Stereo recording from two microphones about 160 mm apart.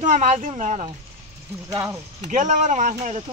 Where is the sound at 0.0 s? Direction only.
50° right (ahead or behind).